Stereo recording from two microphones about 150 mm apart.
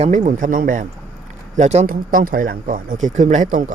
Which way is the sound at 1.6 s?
50° right (ahead or behind).